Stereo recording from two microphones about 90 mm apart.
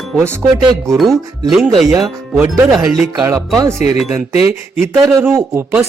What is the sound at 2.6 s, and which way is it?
Speech, 5° right (ahead or behind).